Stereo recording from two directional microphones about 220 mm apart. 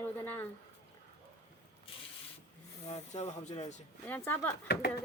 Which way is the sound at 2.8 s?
30° left (ahead or behind).